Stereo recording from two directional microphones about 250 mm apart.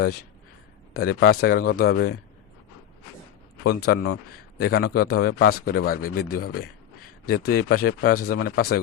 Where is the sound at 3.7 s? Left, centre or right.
Left.